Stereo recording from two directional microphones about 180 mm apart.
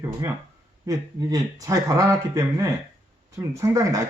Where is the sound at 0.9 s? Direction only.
20° right (ahead or behind).